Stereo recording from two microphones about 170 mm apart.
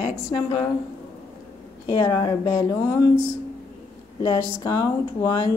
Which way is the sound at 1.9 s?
20° left (ahead or behind).